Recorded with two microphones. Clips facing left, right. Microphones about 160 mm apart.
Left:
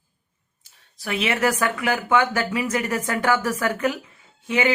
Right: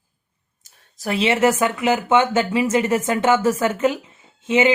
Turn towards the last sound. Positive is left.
turn(degrees=-20)  # may be behind; listen again after turning